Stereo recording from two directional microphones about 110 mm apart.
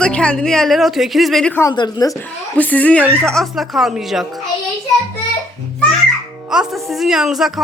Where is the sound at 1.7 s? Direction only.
35° left (ahead or behind).